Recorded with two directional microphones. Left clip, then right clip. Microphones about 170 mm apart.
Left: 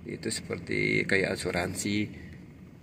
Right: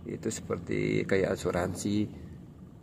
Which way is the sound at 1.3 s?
50° right (ahead or behind).